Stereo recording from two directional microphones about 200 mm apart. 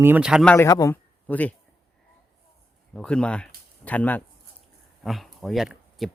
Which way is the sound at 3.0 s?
5° left (ahead or behind).